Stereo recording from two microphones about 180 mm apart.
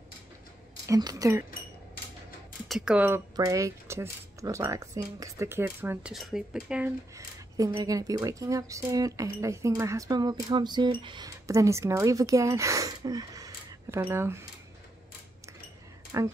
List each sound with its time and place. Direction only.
0.8 s speech: 20° right (ahead or behind)
2.7 s speech: 5° right (ahead or behind)
3.3 s speech: 20° right (ahead or behind)
6.1 s speech: centre (ahead or behind)
7.2 s speech: 20° right (ahead or behind)
16.1 s speech: 15° right (ahead or behind)